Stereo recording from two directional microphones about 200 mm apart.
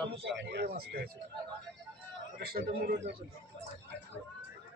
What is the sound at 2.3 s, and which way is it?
Speech, 50° right (ahead or behind).